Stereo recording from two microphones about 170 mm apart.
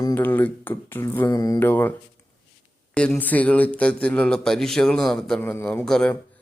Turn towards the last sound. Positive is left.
turn(degrees=5)  # may be behind; listen again after turning